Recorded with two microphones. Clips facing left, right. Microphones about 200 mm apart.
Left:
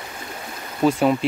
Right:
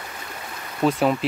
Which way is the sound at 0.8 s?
Centre (ahead or behind).